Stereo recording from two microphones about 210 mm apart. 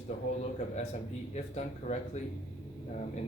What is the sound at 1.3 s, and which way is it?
Speech, 35° left (ahead or behind).